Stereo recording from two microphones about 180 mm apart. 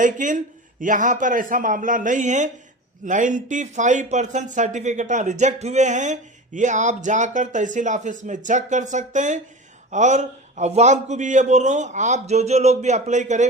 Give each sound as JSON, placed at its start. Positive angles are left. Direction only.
{"t": 0.0, "sound": "a man's voice", "side_deg": -45}